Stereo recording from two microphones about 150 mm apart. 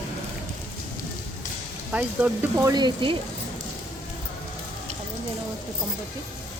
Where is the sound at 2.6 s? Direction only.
25° right (ahead or behind).